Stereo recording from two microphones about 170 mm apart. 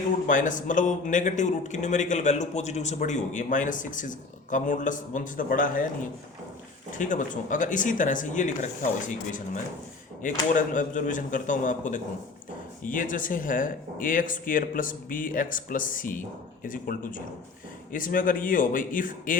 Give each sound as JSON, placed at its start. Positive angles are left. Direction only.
{"t": 0.3, "sound": "a man's voice", "side_deg": 50}
{"t": 6.9, "sound": "a man's voice", "side_deg": 50}